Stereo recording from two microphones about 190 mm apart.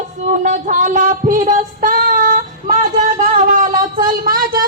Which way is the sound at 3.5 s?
50° right (ahead or behind).